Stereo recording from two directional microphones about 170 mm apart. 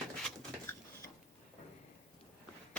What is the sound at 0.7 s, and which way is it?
Dishes, 15° left (ahead or behind).